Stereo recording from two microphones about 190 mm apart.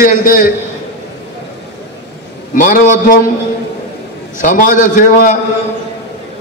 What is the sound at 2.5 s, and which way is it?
Speech, 45° left (ahead or behind).